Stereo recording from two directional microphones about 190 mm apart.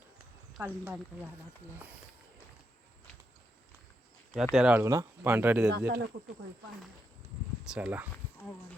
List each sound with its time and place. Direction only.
0.5 s speech: 10° right (ahead or behind)
4.5 s speech: 5° right (ahead or behind)
5.7 s speech: 65° right (ahead or behind)
7.6 s speech: 5° right (ahead or behind)